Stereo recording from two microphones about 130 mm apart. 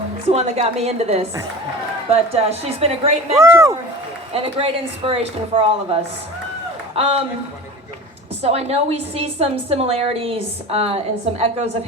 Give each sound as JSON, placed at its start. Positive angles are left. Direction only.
{"t": 0.3, "sound": "a woman's voice", "side_deg": -55}
{"t": 3.3, "sound": "speech", "side_deg": -20}
{"t": 4.3, "sound": "a woman's voice", "side_deg": -45}
{"t": 8.4, "sound": "a woman's voice", "side_deg": -50}